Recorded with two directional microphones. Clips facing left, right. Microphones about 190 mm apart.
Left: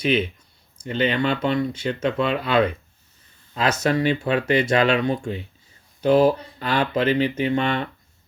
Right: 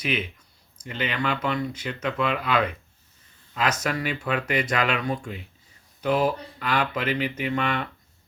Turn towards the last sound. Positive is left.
turn(degrees=30)  # may be behind; listen again after turning